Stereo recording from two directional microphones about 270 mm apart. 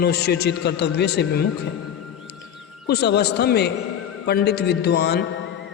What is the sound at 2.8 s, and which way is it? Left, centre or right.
A man's voice, left.